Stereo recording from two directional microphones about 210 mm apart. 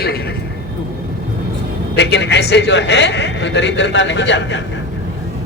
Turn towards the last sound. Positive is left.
turn(degrees=60)  # may be behind; listen again after turning